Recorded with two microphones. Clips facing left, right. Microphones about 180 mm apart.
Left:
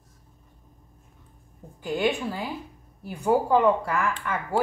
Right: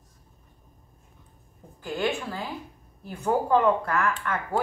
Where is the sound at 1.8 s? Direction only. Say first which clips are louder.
Left 3 dB; 15° left (ahead or behind).